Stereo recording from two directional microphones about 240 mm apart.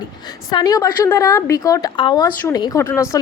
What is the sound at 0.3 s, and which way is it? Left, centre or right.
Speech, centre.